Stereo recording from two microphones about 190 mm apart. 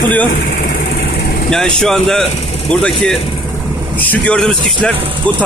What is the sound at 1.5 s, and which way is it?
Speech, 5° left (ahead or behind).